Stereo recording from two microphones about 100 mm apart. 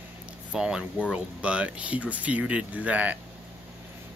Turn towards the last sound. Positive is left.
turn(degrees=-15)  # may be behind; listen again after turning